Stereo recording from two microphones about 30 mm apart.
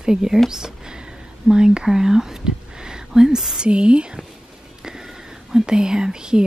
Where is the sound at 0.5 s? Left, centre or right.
Right.